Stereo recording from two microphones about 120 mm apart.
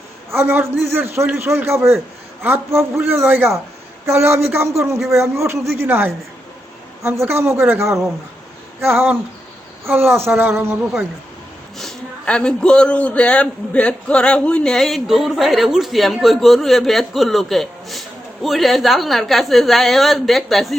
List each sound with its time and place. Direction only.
0.3 s a man's voice: 20° right (ahead or behind)
11.8 s a man's voice: 5° left (ahead or behind)